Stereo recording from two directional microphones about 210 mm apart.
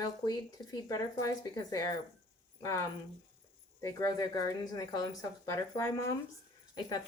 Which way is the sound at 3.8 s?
15° left (ahead or behind).